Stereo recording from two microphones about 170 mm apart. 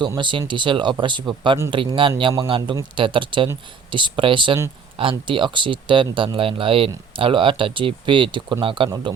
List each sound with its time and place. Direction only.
0.2 s speech: 30° right (ahead or behind)